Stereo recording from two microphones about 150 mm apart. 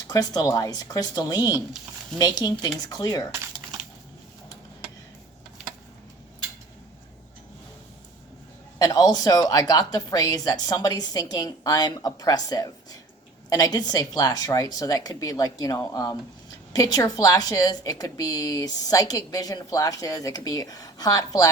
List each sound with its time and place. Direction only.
0.1 s a woman's voice: 25° left (ahead or behind)
8.8 s a woman's voice: 25° left (ahead or behind)